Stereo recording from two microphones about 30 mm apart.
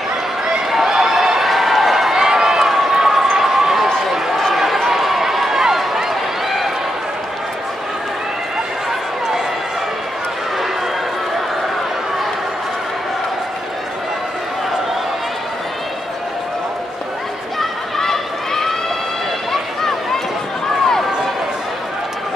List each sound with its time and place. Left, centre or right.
0.5 s a sound: centre
2.1 s run: right
17.6 s run: centre